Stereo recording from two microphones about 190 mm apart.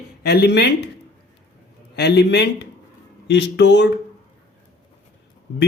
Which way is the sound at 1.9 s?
60° left (ahead or behind).